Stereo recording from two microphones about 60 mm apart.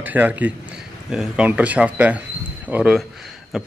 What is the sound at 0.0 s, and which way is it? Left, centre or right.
Speech, right.